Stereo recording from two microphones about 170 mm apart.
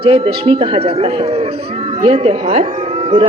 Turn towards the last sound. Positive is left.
turn(degrees=-35)  # may be behind; listen again after turning